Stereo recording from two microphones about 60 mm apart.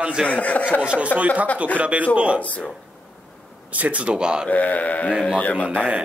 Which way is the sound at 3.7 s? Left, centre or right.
Right.